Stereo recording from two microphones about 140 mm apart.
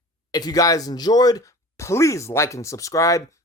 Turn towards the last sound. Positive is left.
turn(degrees=25)  # may be behind; listen again after turning